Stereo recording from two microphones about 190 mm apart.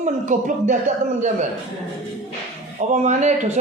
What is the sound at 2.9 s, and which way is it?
Speech, 40° right (ahead or behind).